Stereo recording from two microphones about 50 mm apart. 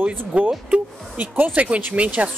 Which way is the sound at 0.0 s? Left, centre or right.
Right.